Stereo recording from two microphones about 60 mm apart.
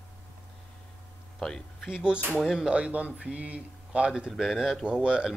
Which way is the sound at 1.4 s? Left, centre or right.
Centre.